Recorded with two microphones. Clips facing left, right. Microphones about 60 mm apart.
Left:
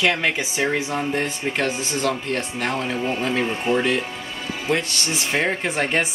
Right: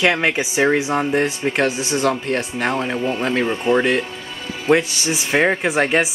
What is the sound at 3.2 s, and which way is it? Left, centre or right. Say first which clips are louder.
Speech: right 3 dB; centre.